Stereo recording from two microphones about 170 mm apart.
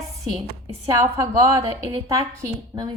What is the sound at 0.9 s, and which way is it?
A woman's voice, 20° right (ahead or behind).